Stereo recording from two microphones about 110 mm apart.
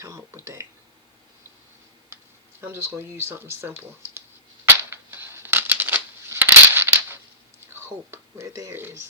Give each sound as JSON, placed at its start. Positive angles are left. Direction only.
{"t": 0.0, "sound": "speech", "side_deg": -25}
{"t": 2.6, "sound": "speech", "side_deg": -20}
{"t": 4.6, "sound": "a sound", "side_deg": -20}
{"t": 7.7, "sound": "speech", "side_deg": -20}